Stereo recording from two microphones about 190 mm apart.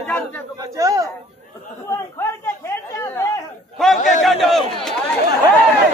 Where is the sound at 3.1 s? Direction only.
15° left (ahead or behind).